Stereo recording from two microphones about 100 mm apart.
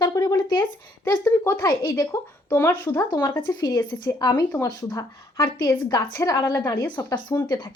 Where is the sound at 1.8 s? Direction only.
25° left (ahead or behind).